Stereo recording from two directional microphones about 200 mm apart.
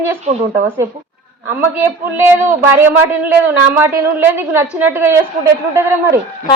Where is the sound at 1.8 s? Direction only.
10° right (ahead or behind).